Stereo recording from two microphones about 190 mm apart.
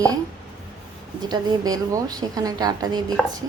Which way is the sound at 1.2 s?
20° right (ahead or behind).